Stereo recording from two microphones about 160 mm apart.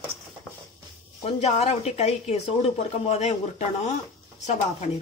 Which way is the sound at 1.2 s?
40° left (ahead or behind).